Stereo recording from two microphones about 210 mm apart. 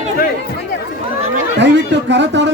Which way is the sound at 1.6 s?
55° right (ahead or behind).